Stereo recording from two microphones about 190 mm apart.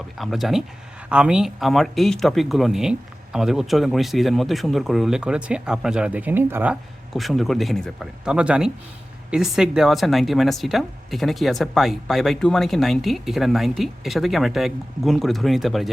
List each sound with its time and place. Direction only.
0.2 s speech: centre (ahead or behind)